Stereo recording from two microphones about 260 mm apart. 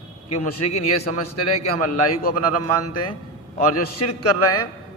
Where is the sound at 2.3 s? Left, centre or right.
Left.